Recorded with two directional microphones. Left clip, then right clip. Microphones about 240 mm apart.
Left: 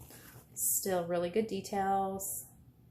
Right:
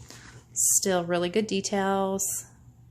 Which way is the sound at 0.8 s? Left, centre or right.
Right.